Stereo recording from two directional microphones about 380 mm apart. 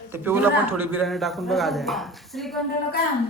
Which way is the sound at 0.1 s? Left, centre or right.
Centre.